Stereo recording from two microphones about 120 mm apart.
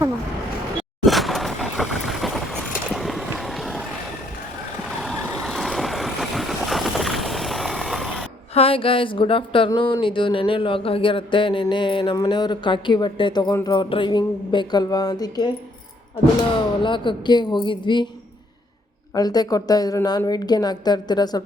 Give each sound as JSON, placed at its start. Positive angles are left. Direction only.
{"t": 1.0, "sound": "vehicle", "side_deg": 0}
{"t": 4.9, "sound": "vehicle", "side_deg": 0}
{"t": 8.5, "sound": "a sound", "side_deg": 50}
{"t": 12.1, "sound": "a woman's voice", "side_deg": 30}
{"t": 16.8, "sound": "a woman's voice", "side_deg": 40}
{"t": 19.1, "sound": "a woman's voice", "side_deg": 35}